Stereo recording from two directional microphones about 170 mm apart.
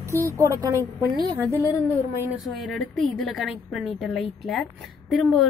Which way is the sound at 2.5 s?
Centre (ahead or behind).